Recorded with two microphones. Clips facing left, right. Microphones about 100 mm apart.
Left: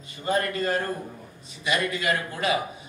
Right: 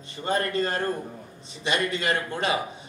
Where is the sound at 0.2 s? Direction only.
30° right (ahead or behind).